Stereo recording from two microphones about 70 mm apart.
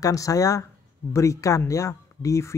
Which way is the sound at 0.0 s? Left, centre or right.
Left.